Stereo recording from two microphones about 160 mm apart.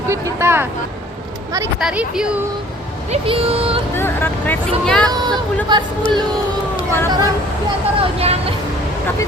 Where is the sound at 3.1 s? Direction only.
35° right (ahead or behind).